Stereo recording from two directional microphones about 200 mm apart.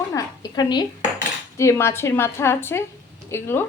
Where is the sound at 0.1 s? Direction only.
15° left (ahead or behind).